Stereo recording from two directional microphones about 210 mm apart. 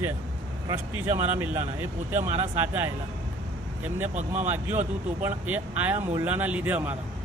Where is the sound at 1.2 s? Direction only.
10° right (ahead or behind).